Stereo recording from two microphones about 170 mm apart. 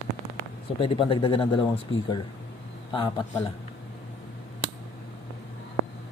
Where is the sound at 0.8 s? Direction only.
30° left (ahead or behind).